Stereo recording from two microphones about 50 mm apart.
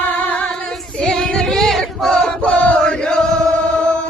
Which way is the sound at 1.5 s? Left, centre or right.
Centre.